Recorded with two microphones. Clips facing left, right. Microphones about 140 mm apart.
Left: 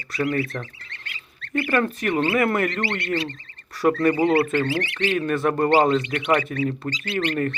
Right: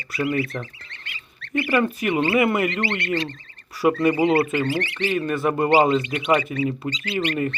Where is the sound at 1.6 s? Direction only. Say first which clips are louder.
Right 1 dB; 5° right (ahead or behind).